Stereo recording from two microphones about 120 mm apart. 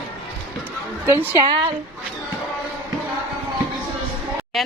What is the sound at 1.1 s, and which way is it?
Speech, 20° right (ahead or behind).